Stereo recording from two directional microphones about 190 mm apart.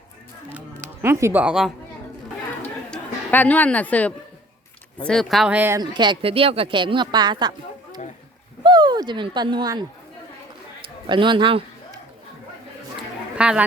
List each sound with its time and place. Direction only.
1.0 s speech: 15° right (ahead or behind)
2.6 s a sound: 10° left (ahead or behind)
5.0 s speech: centre (ahead or behind); by 7.5 s 25° right (ahead or behind)
8.6 s speech: 25° right (ahead or behind)
11.0 s a man's voice: 25° right (ahead or behind)
13.3 s speech: 5° right (ahead or behind)